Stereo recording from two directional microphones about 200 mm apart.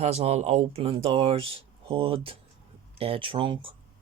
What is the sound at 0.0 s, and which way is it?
Speech, 35° right (ahead or behind).